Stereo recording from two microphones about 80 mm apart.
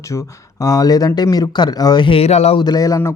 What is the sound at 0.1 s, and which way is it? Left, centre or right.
Speech, left.